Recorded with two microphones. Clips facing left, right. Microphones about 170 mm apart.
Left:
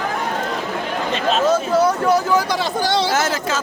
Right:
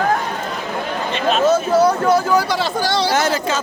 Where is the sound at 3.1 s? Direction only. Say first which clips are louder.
Right 2 dB; centre (ahead or behind).